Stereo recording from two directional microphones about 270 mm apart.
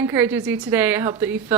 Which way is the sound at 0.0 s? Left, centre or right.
Centre.